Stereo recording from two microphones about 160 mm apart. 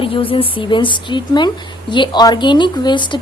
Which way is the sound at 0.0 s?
35° left (ahead or behind).